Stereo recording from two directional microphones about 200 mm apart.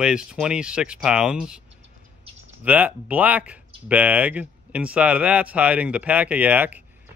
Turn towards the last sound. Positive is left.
turn(degrees=-10)  # may be behind; listen again after turning